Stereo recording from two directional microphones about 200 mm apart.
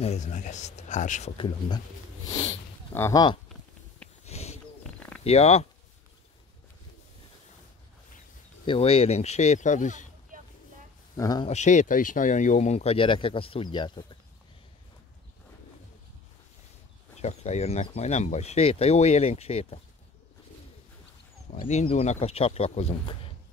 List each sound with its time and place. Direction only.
0.0 s speech: 35° left (ahead or behind)
2.9 s speech: 15° left (ahead or behind)
4.2 s a sound: 30° left (ahead or behind)
5.2 s speech: 30° left (ahead or behind)
8.6 s speech: 30° left (ahead or behind)
11.1 s speech: 20° left (ahead or behind)
11.4 s speech: 35° left (ahead or behind)
17.2 s speech: 35° left (ahead or behind)
21.5 s speech: 30° left (ahead or behind)